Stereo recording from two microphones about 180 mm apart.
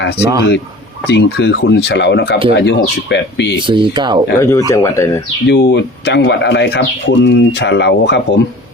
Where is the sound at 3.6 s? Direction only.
25° right (ahead or behind).